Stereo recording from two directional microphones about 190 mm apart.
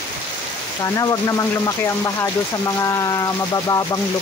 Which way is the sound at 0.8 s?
20° left (ahead or behind).